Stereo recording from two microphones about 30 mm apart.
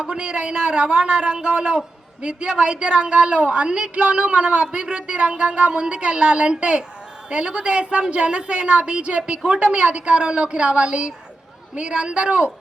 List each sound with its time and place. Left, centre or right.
0.0 s a woman's voice: right